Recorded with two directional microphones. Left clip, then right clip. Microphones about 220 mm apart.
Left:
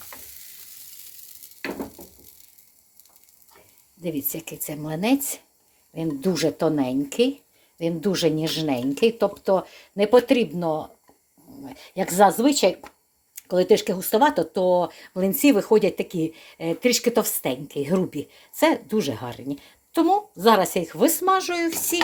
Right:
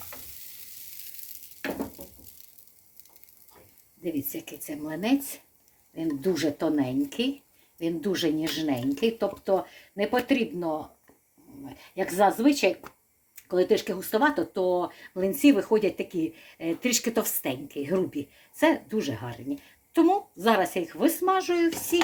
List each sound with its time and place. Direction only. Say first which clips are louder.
4.0 s speech: left 3 dB; 40° left (ahead or behind)